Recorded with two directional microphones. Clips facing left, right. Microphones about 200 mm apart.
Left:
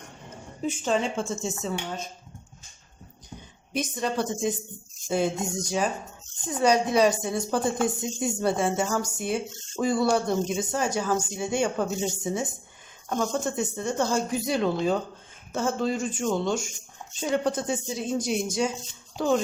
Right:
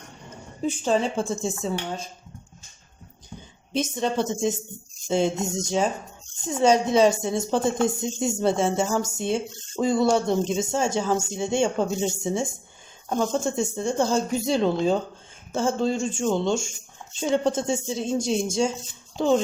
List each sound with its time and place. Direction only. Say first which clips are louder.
0.6 s speech: right 3 dB; 35° right (ahead or behind)
3.7 s a woman's voice: right 3 dB; 25° right (ahead or behind)